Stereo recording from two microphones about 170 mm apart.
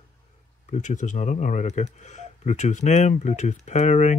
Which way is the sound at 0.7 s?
45° left (ahead or behind).